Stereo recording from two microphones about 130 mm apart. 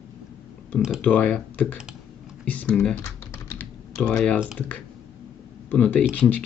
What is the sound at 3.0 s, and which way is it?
Typing, 15° left (ahead or behind).